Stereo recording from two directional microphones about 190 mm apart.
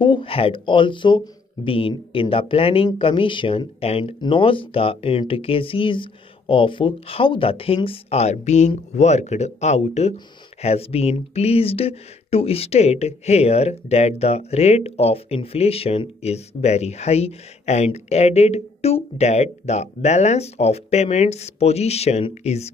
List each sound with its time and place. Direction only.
0.0 s speech: 25° left (ahead or behind)